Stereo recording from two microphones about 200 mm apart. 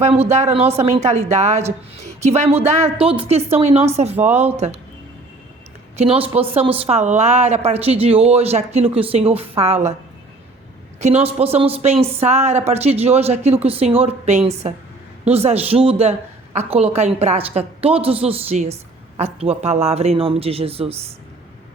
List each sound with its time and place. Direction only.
0.2 s a woman's voice: 35° right (ahead or behind)
6.0 s a woman's voice: 30° right (ahead or behind)
11.0 s a woman's voice: 30° right (ahead or behind)